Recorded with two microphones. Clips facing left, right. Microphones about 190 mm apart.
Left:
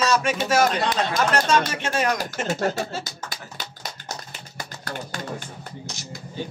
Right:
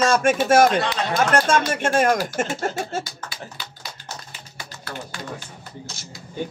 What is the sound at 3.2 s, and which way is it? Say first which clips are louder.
Speech: even; 45° left (ahead or behind).